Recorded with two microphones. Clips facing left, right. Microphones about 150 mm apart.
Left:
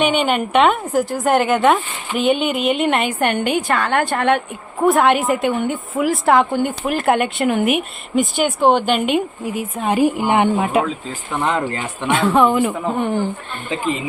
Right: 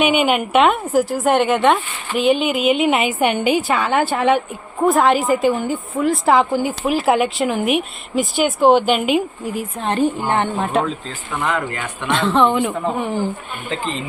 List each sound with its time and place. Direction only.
0.0 s a woman's voice: 10° right (ahead or behind); by 10.9 s 5° left (ahead or behind)
11.3 s speech: 25° left (ahead or behind)
12.0 s a woman's voice: 5° left (ahead or behind)